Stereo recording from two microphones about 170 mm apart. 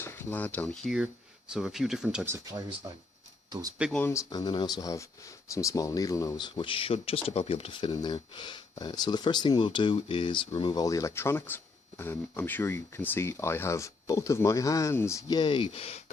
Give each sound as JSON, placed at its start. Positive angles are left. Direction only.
{"t": 0.0, "sound": "speech", "side_deg": 15}
{"t": 2.2, "sound": "speech", "side_deg": -15}
{"t": 3.9, "sound": "speech", "side_deg": 15}